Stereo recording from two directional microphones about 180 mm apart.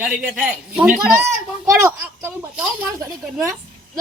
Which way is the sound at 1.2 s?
15° right (ahead or behind).